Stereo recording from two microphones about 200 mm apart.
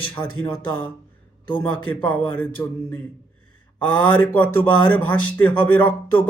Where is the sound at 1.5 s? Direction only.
10° left (ahead or behind).